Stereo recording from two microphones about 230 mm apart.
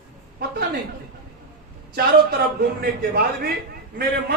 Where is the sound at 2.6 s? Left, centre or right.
Right.